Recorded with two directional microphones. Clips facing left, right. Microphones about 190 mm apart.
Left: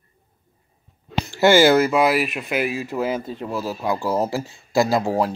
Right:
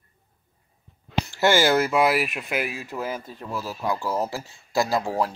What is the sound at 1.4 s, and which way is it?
Speech, 10° left (ahead or behind).